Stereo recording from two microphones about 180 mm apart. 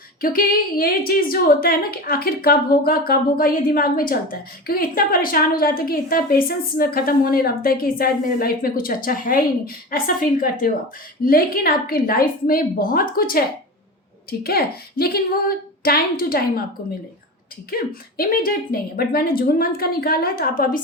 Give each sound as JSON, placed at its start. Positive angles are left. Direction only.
{"t": 0.2, "sound": "a woman's voice", "side_deg": 55}
{"t": 17.7, "sound": "a woman's voice", "side_deg": 55}